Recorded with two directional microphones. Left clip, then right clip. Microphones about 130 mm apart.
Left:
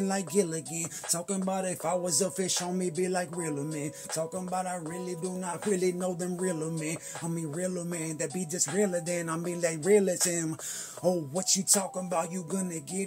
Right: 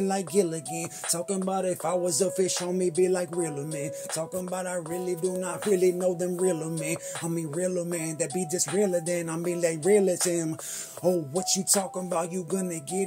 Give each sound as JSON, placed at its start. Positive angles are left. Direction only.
{"t": 0.0, "sound": "speech", "side_deg": -25}
{"t": 1.1, "sound": "music", "side_deg": -25}
{"t": 7.5, "sound": "speech", "side_deg": -30}